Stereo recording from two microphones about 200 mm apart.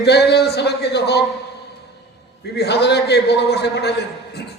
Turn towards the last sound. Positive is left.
turn(degrees=55)  # may be behind; listen again after turning